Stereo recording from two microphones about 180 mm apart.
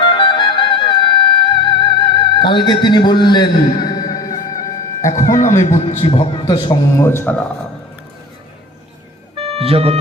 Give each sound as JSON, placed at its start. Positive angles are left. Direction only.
{"t": 0.0, "sound": "music", "side_deg": 25}
{"t": 5.0, "sound": "speech", "side_deg": 20}
{"t": 5.4, "sound": "a man's voice", "side_deg": 45}
{"t": 6.9, "sound": "speech", "side_deg": 15}
{"t": 9.3, "sound": "music", "side_deg": -30}